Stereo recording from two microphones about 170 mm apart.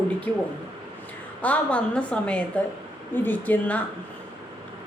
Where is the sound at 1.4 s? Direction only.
10° left (ahead or behind).